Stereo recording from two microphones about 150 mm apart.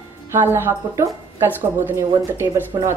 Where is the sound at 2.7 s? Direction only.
25° right (ahead or behind).